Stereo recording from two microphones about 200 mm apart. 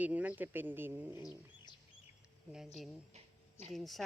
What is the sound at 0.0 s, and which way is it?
Speech, 5° right (ahead or behind).